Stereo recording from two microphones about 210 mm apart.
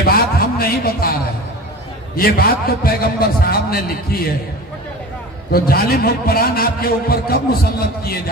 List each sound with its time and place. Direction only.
0.0 s a sound: 45° left (ahead or behind)
2.1 s a man's voice: 45° left (ahead or behind)
5.5 s a man's voice: 45° left (ahead or behind)